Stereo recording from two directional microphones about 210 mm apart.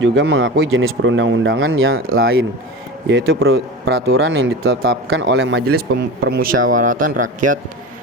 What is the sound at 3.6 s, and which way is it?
Speech, 50° right (ahead or behind).